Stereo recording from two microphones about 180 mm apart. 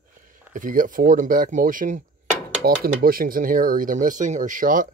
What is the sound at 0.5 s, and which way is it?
Speech, 45° right (ahead or behind).